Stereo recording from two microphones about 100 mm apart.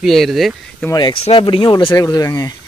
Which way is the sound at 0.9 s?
45° left (ahead or behind).